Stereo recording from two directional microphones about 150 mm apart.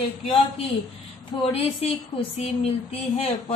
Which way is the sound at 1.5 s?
40° left (ahead or behind).